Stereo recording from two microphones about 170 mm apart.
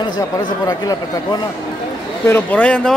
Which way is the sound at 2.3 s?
10° left (ahead or behind).